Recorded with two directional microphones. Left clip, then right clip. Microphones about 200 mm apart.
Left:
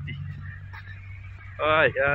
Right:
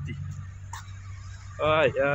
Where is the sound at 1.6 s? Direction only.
15° right (ahead or behind).